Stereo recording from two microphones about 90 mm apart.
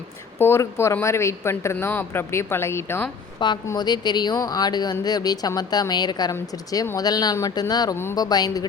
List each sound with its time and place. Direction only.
0.3 s a woman's voice: 25° left (ahead or behind)
1.7 s speech: 20° left (ahead or behind)
3.4 s a woman's voice: 60° left (ahead or behind)